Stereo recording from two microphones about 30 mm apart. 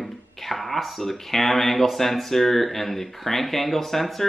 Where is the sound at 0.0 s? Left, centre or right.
Centre.